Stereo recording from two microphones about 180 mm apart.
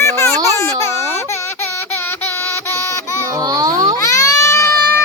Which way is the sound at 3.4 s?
20° right (ahead or behind).